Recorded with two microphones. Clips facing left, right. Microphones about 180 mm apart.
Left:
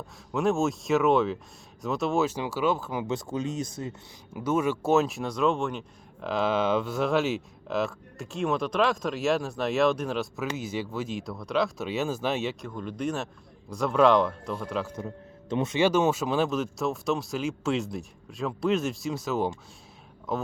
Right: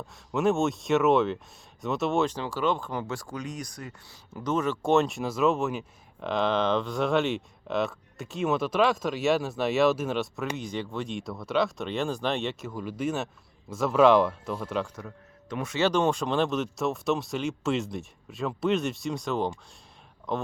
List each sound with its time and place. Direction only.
0.3 s speech: centre (ahead or behind)
3.1 s speech: 20° left (ahead or behind)
4.4 s speech: 10° left (ahead or behind)
14.9 s speech: 25° left (ahead or behind)
15.8 s speech: 5° left (ahead or behind)